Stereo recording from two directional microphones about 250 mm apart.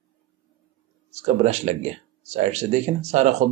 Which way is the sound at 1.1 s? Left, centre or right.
Right.